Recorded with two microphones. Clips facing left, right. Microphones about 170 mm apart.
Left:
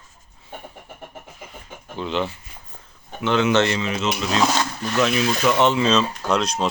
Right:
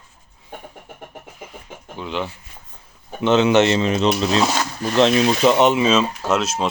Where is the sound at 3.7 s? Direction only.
35° right (ahead or behind).